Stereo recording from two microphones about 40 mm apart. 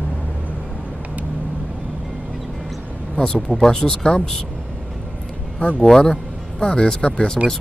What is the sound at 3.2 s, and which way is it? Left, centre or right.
Speech, left.